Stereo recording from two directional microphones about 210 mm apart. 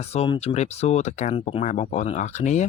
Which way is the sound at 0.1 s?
30° left (ahead or behind).